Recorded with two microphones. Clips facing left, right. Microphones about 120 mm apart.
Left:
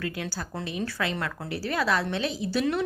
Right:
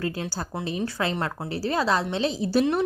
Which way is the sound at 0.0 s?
30° right (ahead or behind).